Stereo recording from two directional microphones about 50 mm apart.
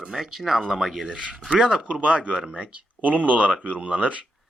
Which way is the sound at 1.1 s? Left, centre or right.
Right.